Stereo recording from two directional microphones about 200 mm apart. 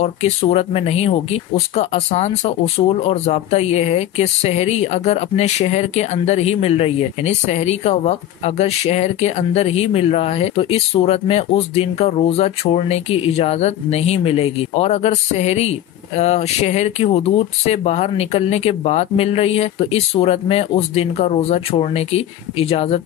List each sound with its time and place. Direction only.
0.0 s speech: 30° left (ahead or behind)